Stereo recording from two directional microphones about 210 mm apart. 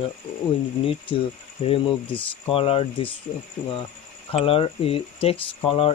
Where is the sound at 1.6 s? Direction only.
25° left (ahead or behind).